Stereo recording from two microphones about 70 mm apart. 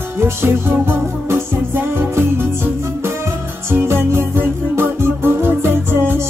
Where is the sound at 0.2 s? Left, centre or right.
Right.